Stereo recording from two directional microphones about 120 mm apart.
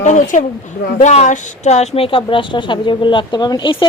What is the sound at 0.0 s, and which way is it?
Speech, 90° left.